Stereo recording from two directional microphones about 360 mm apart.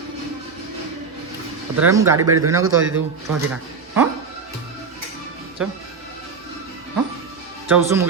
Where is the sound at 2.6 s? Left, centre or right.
Right.